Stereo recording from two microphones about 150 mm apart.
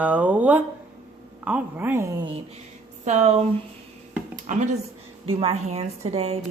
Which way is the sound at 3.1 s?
50° right (ahead or behind).